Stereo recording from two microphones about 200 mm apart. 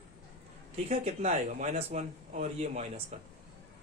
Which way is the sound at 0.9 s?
35° right (ahead or behind).